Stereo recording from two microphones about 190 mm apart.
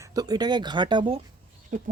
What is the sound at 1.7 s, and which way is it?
Speech, 45° right (ahead or behind).